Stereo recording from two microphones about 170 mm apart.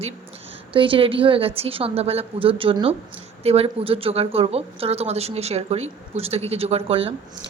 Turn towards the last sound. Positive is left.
turn(degrees=-35)  # may be behind; listen again after turning